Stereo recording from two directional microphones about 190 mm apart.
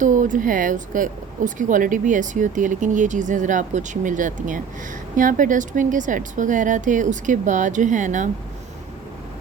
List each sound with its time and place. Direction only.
0.0 s a woman's voice: 40° right (ahead or behind)